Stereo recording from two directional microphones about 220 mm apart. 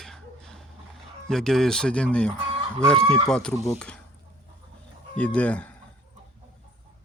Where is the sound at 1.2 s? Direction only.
Centre (ahead or behind).